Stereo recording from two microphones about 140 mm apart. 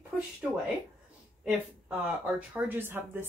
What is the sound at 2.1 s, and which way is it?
Speech, 10° right (ahead or behind).